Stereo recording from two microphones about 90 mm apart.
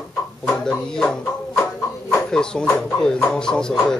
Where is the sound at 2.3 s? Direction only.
10° left (ahead or behind).